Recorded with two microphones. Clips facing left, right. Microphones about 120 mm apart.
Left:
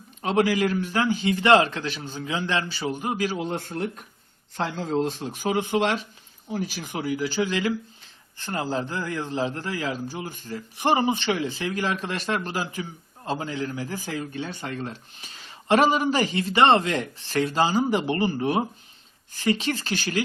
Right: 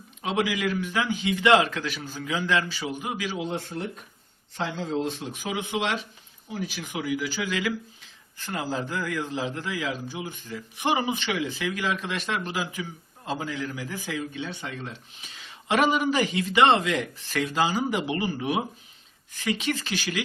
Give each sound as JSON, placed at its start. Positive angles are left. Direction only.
{"t": 0.2, "sound": "speech", "side_deg": 45}
{"t": 3.0, "sound": "speech", "side_deg": 40}
{"t": 14.2, "sound": "speech", "side_deg": 45}